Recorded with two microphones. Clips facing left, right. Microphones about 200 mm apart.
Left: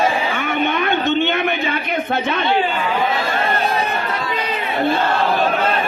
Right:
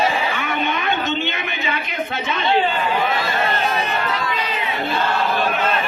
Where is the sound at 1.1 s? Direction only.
55° left (ahead or behind).